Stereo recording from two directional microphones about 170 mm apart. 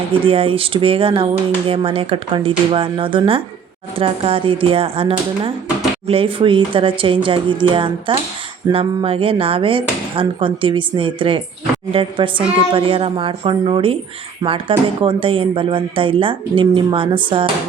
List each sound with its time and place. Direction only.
0.3 s speech: 35° right (ahead or behind)